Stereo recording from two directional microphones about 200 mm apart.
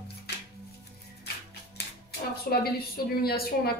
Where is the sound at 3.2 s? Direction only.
50° left (ahead or behind).